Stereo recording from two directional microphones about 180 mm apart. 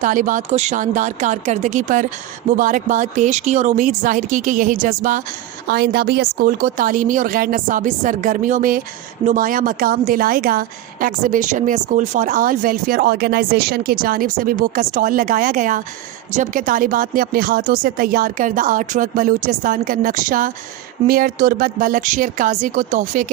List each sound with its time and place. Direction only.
0.0 s a woman's voice: 50° right (ahead or behind)
5.6 s a woman's voice: 60° right (ahead or behind); by 23.2 s 45° right (ahead or behind)